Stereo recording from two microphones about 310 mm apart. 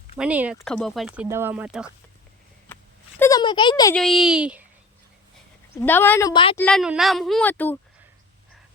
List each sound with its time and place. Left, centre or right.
0.2 s speech: centre
3.2 s a child's voice: centre
5.7 s a child's voice: centre
6.6 s speech: centre